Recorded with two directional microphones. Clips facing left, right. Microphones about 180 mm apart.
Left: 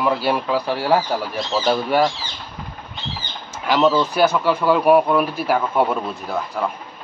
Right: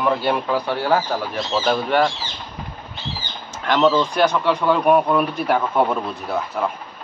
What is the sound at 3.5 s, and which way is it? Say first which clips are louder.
A man's voice: even; 10° left (ahead or behind).